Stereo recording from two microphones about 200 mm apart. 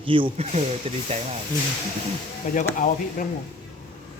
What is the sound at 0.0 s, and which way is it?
A man's voice, 25° right (ahead or behind).